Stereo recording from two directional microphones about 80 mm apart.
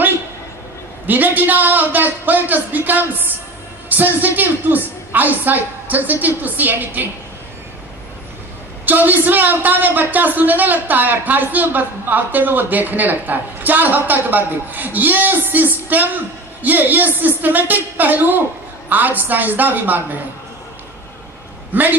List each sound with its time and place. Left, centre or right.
1.0 s a man's voice: right
8.8 s a man's voice: right
21.7 s a man's voice: right